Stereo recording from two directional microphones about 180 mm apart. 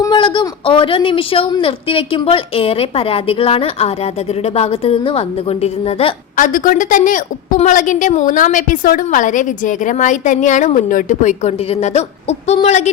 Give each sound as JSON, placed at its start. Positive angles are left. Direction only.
{"t": 0.0, "sound": "speech", "side_deg": 25}
{"t": 6.3, "sound": "a woman's voice", "side_deg": 45}